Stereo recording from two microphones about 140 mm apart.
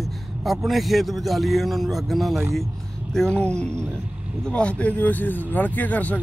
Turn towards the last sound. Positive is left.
turn(degrees=10)  # may be behind; listen again after turning